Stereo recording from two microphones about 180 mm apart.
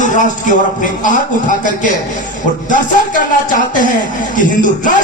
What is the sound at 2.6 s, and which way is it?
Speech, 45° left (ahead or behind).